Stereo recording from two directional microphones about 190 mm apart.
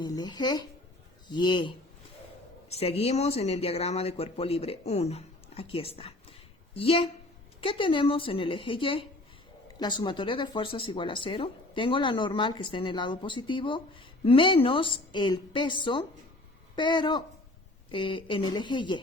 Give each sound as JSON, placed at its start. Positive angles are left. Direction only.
{"t": 0.0, "sound": "a man's voice", "side_deg": 20}